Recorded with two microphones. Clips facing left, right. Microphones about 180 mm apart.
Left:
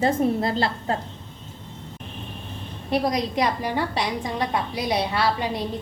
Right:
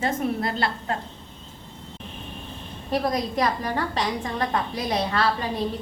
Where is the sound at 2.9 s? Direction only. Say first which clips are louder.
Left 1 dB; 15° left (ahead or behind).